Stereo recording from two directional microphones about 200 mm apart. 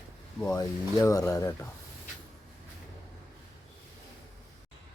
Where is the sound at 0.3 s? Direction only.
15° left (ahead or behind).